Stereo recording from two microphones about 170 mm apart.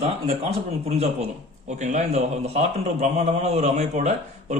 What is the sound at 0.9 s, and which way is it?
A man's voice, 35° right (ahead or behind).